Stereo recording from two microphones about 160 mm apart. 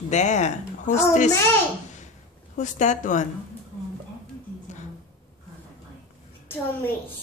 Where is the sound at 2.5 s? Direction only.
50° left (ahead or behind).